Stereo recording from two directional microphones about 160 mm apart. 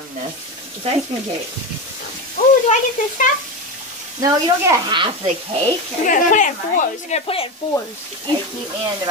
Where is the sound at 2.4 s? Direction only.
55° left (ahead or behind).